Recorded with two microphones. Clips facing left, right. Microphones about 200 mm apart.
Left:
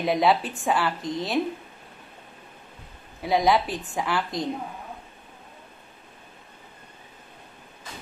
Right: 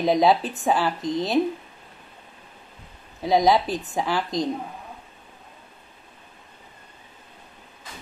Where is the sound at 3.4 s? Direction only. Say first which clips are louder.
Right 2 dB; 20° right (ahead or behind).